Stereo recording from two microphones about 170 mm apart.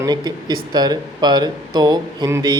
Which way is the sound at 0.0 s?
25° right (ahead or behind).